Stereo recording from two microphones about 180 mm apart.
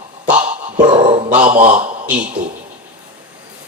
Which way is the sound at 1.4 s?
45° right (ahead or behind).